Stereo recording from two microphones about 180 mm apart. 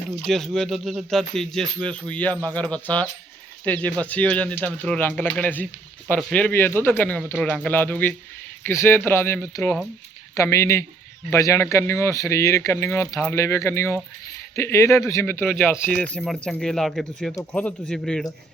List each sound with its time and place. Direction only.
0.3 s speech: centre (ahead or behind)
15.6 s speech: centre (ahead or behind)